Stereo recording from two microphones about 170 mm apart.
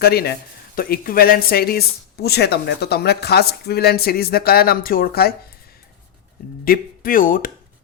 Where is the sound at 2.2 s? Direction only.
75° left (ahead or behind).